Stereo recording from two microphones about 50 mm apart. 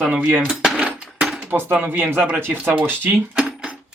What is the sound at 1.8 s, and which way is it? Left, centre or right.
Speech, right.